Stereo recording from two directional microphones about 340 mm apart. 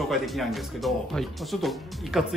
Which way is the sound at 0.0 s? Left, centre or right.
Centre.